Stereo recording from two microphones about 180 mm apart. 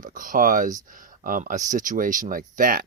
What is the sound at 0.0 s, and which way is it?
Speech, 50° right (ahead or behind).